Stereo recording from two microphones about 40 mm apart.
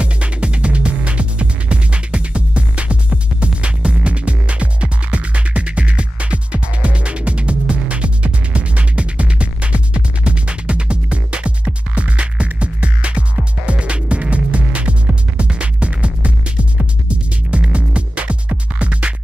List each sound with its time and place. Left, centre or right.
0.0 s music: right